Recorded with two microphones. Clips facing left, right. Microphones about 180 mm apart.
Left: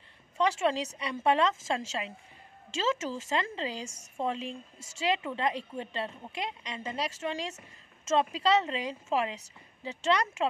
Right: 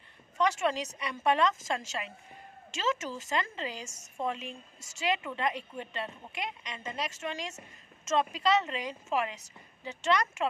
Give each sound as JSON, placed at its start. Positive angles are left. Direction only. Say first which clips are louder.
{"t": 0.4, "sound": "a woman's voice", "louder": "left 1 dB", "side_deg": 30}